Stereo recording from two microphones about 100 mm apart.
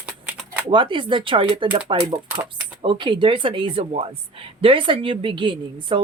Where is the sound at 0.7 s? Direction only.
55° right (ahead or behind).